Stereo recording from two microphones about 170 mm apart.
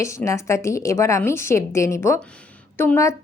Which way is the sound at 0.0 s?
15° left (ahead or behind).